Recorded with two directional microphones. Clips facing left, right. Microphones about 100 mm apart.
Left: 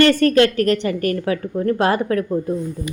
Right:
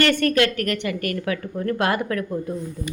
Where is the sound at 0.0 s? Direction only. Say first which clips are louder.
Left 5 dB; 35° left (ahead or behind).